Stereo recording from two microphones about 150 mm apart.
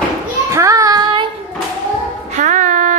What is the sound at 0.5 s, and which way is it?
Child singing, 20° right (ahead or behind).